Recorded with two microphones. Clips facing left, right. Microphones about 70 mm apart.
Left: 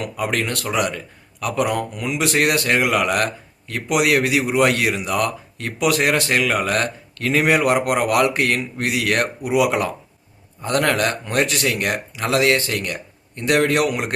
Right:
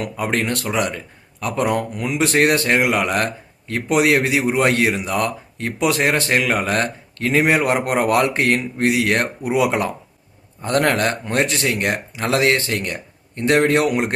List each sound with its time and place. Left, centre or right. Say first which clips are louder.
0.0 s a man's voice: right 1 dB; right